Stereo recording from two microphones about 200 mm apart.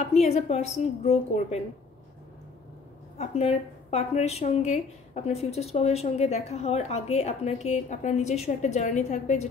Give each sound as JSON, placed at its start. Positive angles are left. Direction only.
{"t": 0.0, "sound": "a woman's voice", "side_deg": 30}
{"t": 3.2, "sound": "a woman's voice", "side_deg": 30}